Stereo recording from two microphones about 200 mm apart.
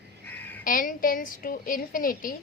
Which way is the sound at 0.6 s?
45° left (ahead or behind).